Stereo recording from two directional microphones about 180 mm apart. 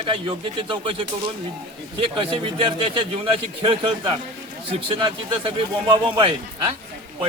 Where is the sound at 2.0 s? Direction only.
30° right (ahead or behind).